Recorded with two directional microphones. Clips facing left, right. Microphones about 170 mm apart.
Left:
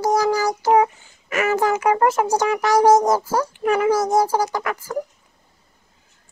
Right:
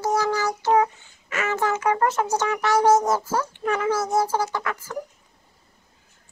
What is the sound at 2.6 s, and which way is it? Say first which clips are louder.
Speech: left 3 dB; 40° left (ahead or behind).